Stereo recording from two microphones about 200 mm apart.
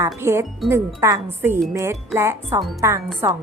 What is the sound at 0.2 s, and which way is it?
A woman's voice, 10° right (ahead or behind).